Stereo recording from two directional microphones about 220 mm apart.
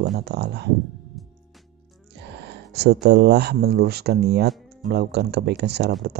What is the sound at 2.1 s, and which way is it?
Speech, 50° right (ahead or behind).